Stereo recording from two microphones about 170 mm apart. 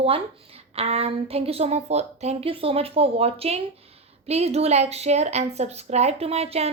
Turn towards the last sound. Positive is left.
turn(degrees=-35)  # may be behind; listen again after turning